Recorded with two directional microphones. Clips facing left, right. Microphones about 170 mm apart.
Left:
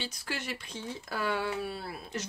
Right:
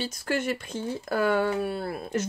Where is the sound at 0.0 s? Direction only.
45° right (ahead or behind).